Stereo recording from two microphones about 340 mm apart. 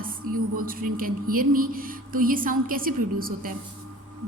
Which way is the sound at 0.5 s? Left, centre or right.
Right.